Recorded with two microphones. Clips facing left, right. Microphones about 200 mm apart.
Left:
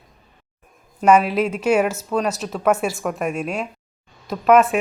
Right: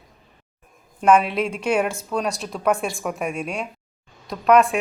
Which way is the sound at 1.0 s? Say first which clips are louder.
Left 2 dB; 5° left (ahead or behind).